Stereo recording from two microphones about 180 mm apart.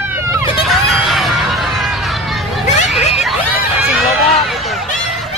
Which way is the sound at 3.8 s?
5° right (ahead or behind).